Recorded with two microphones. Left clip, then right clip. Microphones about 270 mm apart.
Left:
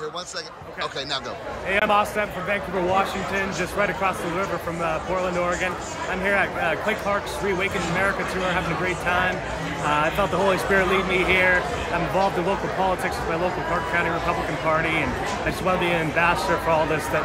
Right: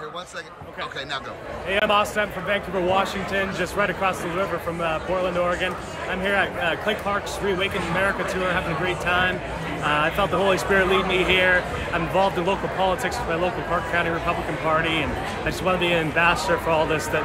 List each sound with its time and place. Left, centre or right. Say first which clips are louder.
1.7 s speech: even; centre
5.4 s speech: right 1 dB; centre
8.8 s speech: right 1 dB; centre
11.1 s speech: even; left
11.3 s speech: even; centre
14.7 s speech: even; centre